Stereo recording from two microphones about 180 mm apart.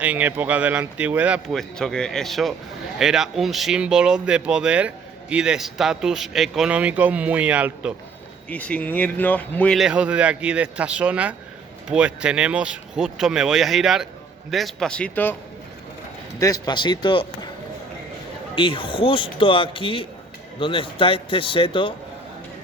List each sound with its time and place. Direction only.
0.0 s a man's voice: 10° right (ahead or behind)
8.4 s speech: 5° left (ahead or behind)
16.4 s speech: 20° left (ahead or behind)
18.5 s speech: 30° left (ahead or behind)